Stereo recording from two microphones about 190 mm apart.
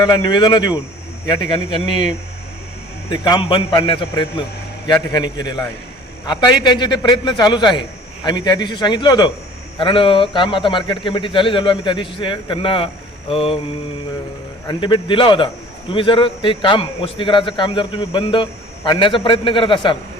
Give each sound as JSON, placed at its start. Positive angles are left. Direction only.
{"t": 0.0, "sound": "a man's voice", "side_deg": 20}
{"t": 3.1, "sound": "a man's voice", "side_deg": 25}
{"t": 5.1, "sound": "a man's voice", "side_deg": 20}
{"t": 14.7, "sound": "a man's voice", "side_deg": 25}